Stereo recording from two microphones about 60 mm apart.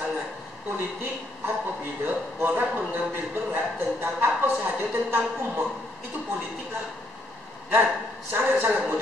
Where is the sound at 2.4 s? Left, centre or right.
Right.